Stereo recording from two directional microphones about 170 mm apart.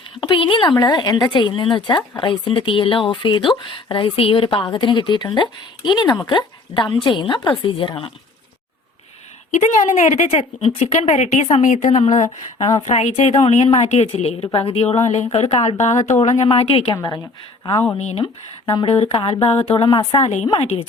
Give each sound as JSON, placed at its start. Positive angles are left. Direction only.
{"t": 0.2, "sound": "speech", "side_deg": 30}
{"t": 9.5, "sound": "a woman's voice", "side_deg": 45}
{"t": 18.0, "sound": "speech", "side_deg": 40}
{"t": 18.6, "sound": "speech", "side_deg": 25}